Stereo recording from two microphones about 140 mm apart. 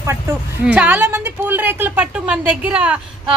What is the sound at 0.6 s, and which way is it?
A woman's voice, 10° right (ahead or behind).